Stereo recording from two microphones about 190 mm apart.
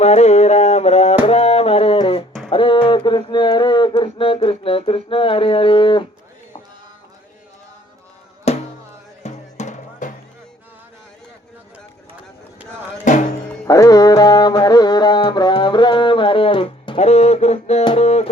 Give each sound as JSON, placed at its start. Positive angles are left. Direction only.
{"t": 0.0, "sound": "music", "side_deg": 35}
{"t": 1.2, "sound": "a sound", "side_deg": 30}
{"t": 8.5, "sound": "music", "side_deg": 35}
{"t": 13.1, "sound": "music", "side_deg": 40}
{"t": 13.7, "sound": "music", "side_deg": 20}